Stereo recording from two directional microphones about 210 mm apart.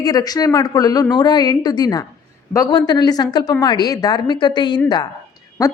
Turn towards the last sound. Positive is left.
turn(degrees=15)  # may be behind; listen again after turning